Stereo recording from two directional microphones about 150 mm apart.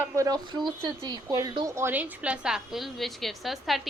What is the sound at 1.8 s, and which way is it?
A woman's voice, 15° right (ahead or behind).